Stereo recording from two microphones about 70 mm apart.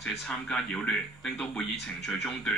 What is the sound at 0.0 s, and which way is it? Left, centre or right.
Speech, centre.